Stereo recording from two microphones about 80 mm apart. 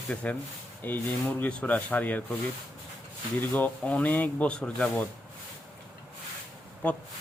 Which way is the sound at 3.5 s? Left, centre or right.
Centre.